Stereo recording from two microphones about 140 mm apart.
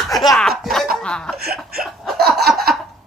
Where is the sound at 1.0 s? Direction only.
5° left (ahead or behind).